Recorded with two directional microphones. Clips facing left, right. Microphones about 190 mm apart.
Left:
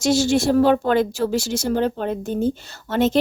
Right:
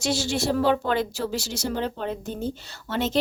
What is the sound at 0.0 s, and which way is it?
Speech, 45° left (ahead or behind).